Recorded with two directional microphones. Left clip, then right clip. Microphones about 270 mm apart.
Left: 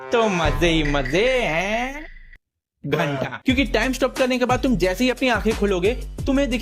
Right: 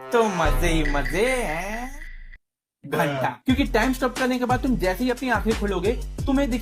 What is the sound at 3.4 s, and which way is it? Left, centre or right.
Speech, left.